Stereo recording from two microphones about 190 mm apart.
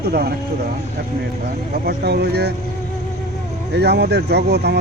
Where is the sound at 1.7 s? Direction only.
55° right (ahead or behind).